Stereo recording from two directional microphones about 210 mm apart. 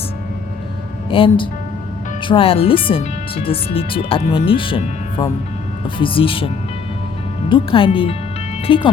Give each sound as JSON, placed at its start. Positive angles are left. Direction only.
{"t": 1.1, "sound": "speech", "side_deg": 25}
{"t": 7.5, "sound": "speech", "side_deg": 25}